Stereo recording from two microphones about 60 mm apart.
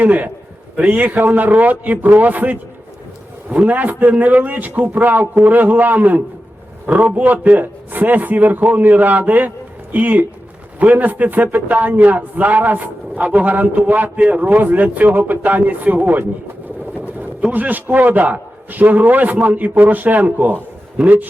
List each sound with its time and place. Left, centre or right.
0.0 s a man's voice: right
0.8 s a man's voice: centre
1.0 s a man's voice: right